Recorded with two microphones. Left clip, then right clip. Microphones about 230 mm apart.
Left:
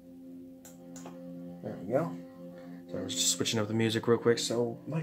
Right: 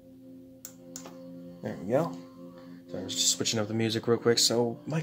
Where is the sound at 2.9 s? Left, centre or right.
Centre.